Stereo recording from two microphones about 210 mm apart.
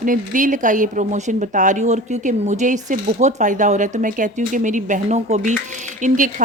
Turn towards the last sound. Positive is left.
turn(degrees=-40)  # may be behind; listen again after turning